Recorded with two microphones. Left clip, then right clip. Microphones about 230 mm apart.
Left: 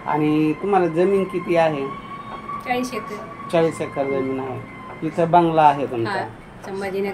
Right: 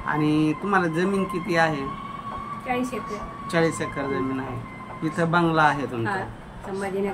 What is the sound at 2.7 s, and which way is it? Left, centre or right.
Speech, centre.